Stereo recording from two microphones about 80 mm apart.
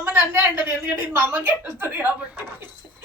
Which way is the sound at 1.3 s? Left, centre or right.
Right.